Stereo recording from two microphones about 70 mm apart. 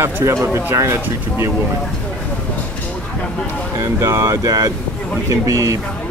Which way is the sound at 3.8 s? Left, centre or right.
Right.